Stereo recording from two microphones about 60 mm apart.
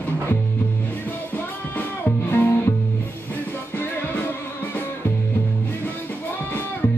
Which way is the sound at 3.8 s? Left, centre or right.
Left.